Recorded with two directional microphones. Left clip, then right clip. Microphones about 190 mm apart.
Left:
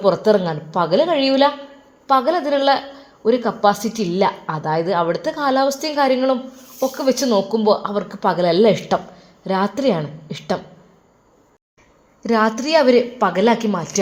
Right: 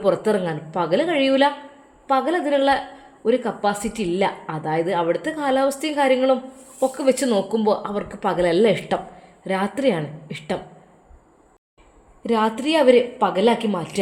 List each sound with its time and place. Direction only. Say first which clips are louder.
0.0 s a woman's voice: left 4 dB; 10° left (ahead or behind)
12.2 s a woman's voice: left 3 dB; 15° left (ahead or behind)